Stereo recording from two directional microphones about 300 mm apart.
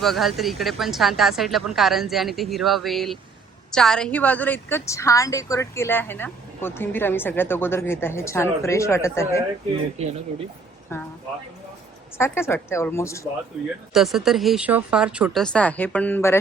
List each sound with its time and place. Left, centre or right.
0.0 s a woman's voice: centre
10.0 s speech: right
10.9 s a woman's voice: centre
12.1 s a woman's voice: centre
13.9 s speech: centre